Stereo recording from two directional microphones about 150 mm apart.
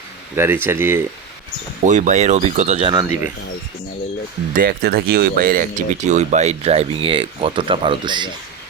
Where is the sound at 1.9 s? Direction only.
55° right (ahead or behind).